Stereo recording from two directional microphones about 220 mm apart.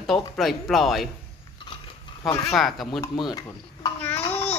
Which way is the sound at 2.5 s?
Centre (ahead or behind).